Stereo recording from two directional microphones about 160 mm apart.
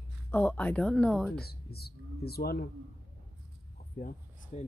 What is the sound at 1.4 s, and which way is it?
Speech, 80° left.